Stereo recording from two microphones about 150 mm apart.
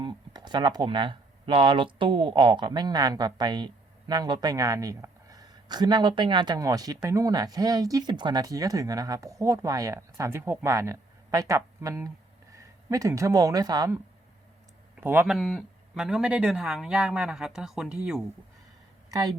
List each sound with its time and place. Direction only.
0.0 s speech: 30° right (ahead or behind)
14.9 s speech: 15° right (ahead or behind)
15.3 s speech: centre (ahead or behind)